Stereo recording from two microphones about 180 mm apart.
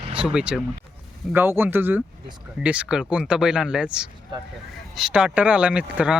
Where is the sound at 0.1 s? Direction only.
5° right (ahead or behind).